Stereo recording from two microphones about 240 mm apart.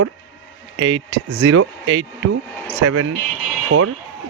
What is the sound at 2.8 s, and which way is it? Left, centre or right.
Speech, right.